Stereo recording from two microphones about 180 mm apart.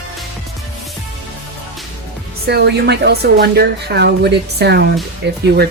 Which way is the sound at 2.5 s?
65° right (ahead or behind).